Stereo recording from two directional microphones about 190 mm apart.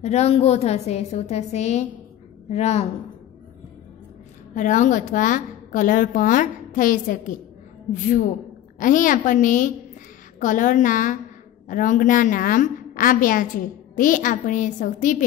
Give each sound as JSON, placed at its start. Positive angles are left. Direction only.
{"t": 0.0, "sound": "a woman's voice", "side_deg": 35}
{"t": 4.6, "sound": "a woman's voice", "side_deg": 40}